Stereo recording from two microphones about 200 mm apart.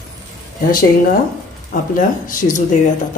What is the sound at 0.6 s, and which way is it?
Speech, 45° left (ahead or behind).